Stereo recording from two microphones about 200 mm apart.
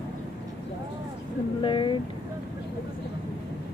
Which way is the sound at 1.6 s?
25° left (ahead or behind).